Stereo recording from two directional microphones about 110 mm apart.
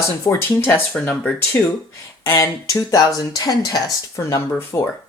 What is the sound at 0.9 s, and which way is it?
Speech, 10° left (ahead or behind).